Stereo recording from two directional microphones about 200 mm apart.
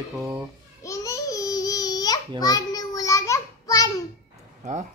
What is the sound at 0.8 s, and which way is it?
Babbling, 15° left (ahead or behind).